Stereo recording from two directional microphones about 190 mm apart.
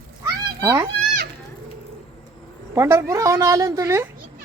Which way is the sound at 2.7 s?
15° right (ahead or behind).